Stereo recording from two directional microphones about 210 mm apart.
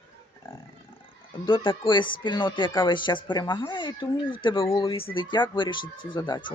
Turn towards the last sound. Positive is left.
turn(degrees=20)  # may be behind; listen again after turning